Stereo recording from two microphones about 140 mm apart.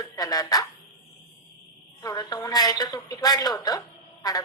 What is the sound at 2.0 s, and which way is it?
A woman's voice, 30° left (ahead or behind).